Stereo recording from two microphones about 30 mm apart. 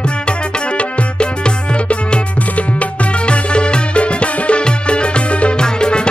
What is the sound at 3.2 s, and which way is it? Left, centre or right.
Music, left.